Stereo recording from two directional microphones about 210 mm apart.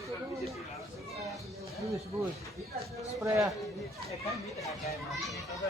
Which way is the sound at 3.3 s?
15° right (ahead or behind).